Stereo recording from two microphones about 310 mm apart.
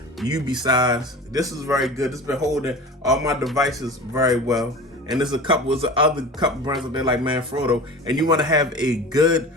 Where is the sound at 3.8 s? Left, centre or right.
Centre.